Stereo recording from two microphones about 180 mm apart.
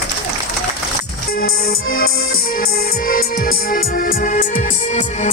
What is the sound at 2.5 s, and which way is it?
Music, 55° left (ahead or behind).